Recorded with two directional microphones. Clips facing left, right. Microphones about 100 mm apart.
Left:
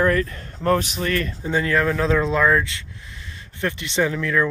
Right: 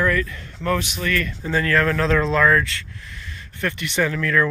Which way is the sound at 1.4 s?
15° left (ahead or behind).